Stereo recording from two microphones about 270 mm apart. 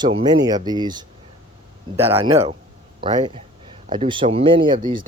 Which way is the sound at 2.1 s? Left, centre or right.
Right.